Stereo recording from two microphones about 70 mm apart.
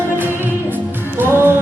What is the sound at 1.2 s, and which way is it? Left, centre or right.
Music, right.